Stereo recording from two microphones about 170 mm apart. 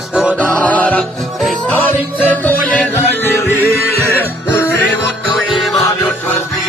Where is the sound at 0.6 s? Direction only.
10° left (ahead or behind).